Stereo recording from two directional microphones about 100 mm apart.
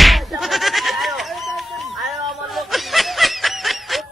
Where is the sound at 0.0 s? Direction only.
Centre (ahead or behind).